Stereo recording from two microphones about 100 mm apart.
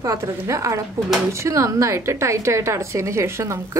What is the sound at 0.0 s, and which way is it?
A woman's voice, 30° right (ahead or behind).